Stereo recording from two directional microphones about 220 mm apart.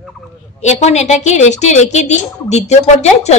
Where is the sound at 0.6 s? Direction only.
30° left (ahead or behind).